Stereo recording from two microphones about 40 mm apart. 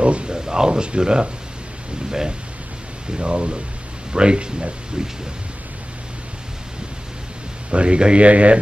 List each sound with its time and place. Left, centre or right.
0.0 s speech: right
7.7 s speech: right